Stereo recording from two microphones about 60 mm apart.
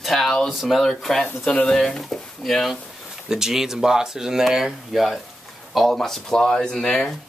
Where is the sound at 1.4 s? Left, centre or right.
Left.